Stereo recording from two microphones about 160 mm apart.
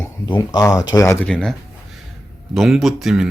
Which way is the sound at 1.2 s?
5° left (ahead or behind).